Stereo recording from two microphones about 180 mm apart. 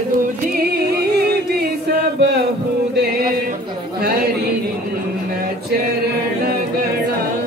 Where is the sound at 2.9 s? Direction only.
60° right (ahead or behind).